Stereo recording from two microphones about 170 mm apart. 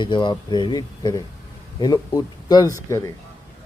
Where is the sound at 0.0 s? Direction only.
25° left (ahead or behind).